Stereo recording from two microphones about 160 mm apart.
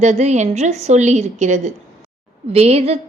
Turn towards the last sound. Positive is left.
turn(degrees=-40)  # may be behind; listen again after turning